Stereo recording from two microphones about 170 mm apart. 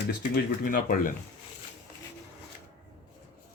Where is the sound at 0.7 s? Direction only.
60° left (ahead or behind).